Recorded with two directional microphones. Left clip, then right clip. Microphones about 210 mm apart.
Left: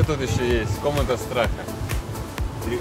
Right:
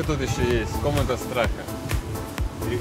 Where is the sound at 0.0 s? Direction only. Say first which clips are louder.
Left 1 dB; centre (ahead or behind).